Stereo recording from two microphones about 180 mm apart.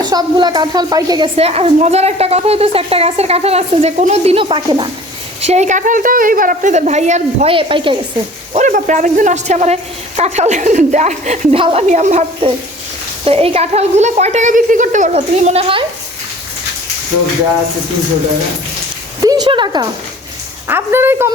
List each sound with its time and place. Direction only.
0.0 s speech: 25° right (ahead or behind)
1.4 s a woman's voice: 35° right (ahead or behind)
5.4 s a woman's voice: 40° right (ahead or behind)
8.5 s a woman's voice: 45° right (ahead or behind)
19.2 s speech: 20° right (ahead or behind)
20.7 s speech: 10° right (ahead or behind)